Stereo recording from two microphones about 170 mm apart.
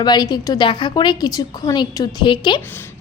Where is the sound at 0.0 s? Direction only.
25° left (ahead or behind).